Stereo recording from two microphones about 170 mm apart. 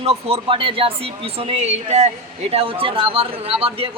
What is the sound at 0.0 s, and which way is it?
Speech, 35° right (ahead or behind).